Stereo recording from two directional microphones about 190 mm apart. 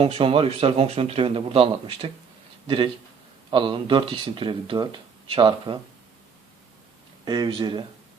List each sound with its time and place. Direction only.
0.0 s speech: 30° right (ahead or behind)
7.3 s speech: 25° right (ahead or behind)